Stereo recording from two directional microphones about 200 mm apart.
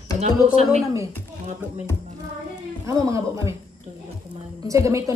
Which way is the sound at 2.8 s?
15° right (ahead or behind).